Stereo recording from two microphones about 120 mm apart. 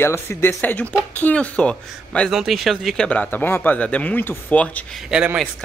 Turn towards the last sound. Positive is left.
turn(degrees=-5)  # may be behind; listen again after turning